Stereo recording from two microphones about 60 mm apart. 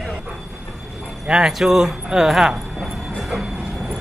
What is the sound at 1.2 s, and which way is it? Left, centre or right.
Speech, centre.